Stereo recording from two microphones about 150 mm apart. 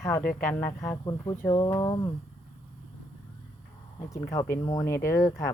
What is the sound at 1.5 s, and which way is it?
Speech, 30° left (ahead or behind).